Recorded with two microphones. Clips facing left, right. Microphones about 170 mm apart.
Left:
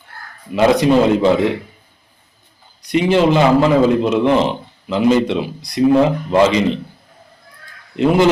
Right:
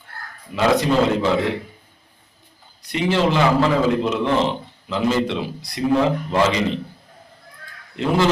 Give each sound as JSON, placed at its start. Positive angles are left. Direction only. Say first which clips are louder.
{"t": 0.5, "sound": "a man's voice", "louder": "left 5 dB", "side_deg": 20}
{"t": 2.8, "sound": "a man's voice", "louder": "left 6 dB", "side_deg": 15}
{"t": 7.9, "sound": "a man's voice", "louder": "left 6 dB", "side_deg": 15}